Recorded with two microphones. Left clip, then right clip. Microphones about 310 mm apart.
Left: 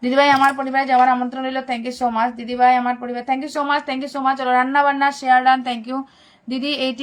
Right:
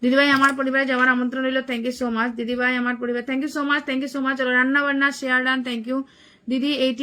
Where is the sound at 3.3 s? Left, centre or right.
Centre.